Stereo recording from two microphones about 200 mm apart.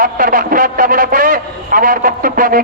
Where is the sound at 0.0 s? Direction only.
45° right (ahead or behind).